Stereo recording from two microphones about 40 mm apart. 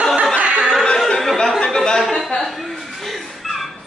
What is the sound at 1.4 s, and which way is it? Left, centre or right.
Speech, centre.